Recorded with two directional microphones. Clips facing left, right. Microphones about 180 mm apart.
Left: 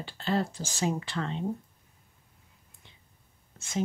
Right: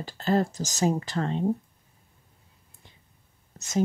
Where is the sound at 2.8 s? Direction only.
40° right (ahead or behind).